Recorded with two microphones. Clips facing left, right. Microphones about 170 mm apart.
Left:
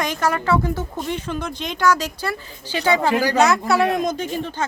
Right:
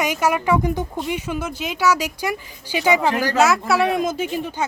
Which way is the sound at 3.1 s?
10° left (ahead or behind).